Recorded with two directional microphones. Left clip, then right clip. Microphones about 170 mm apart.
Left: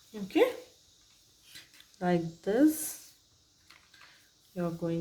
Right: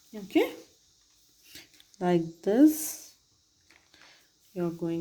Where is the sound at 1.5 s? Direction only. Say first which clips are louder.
Right 3 dB; 30° right (ahead or behind).